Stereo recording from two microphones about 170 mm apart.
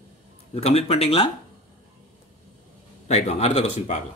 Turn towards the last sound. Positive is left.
turn(degrees=40)  # may be behind; listen again after turning